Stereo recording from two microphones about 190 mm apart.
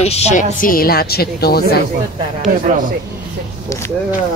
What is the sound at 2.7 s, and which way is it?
Speech, 40° right (ahead or behind).